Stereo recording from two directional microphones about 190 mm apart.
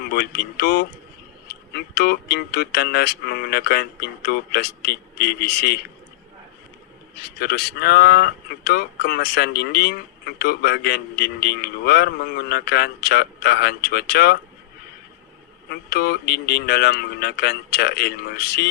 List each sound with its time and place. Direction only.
0.1 s speech: 55° left (ahead or behind)
7.2 s speech: 55° left (ahead or behind)
15.7 s speech: 55° left (ahead or behind)